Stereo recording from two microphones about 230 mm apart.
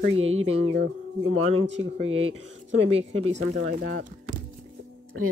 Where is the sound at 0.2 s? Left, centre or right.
Right.